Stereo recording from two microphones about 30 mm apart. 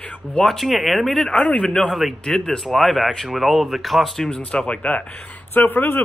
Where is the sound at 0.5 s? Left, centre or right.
Centre.